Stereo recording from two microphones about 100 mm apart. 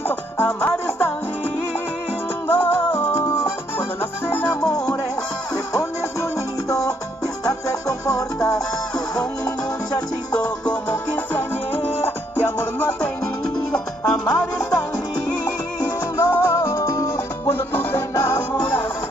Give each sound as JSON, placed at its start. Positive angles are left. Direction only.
{"t": 0.0, "sound": "music", "side_deg": 20}
{"t": 2.4, "sound": "music", "side_deg": 20}
{"t": 7.4, "sound": "music", "side_deg": 35}
{"t": 10.3, "sound": "music", "side_deg": 10}
{"t": 16.2, "sound": "music", "side_deg": 25}